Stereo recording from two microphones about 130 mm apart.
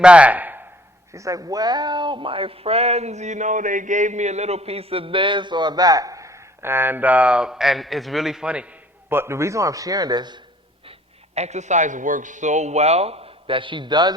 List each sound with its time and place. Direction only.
0.0 s speech: 10° right (ahead or behind)
1.1 s speech: 25° right (ahead or behind)
11.3 s a man's voice: 60° right (ahead or behind); by 14.1 s 35° right (ahead or behind)